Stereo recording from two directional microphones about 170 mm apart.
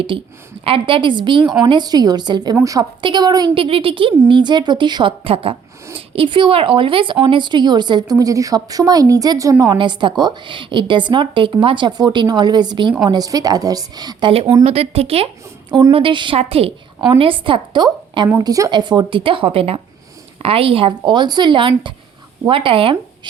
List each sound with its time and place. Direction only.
0.1 s a woman's voice: 30° right (ahead or behind)